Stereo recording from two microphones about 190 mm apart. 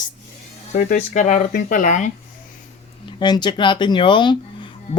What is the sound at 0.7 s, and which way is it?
Speech, 45° left (ahead or behind).